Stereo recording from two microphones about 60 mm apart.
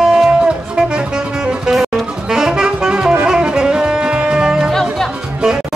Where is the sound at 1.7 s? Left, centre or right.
Centre.